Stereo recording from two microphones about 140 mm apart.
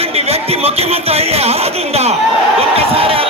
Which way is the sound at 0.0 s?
45° right (ahead or behind).